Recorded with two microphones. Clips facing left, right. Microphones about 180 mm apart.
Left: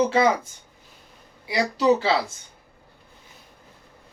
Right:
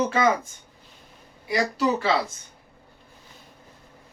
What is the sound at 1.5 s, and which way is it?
Speech, 25° left (ahead or behind).